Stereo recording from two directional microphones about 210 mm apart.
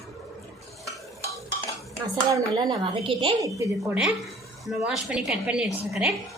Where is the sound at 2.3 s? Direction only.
20° right (ahead or behind).